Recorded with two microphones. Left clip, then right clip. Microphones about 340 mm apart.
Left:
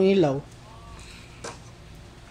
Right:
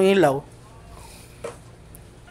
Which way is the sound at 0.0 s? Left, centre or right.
Right.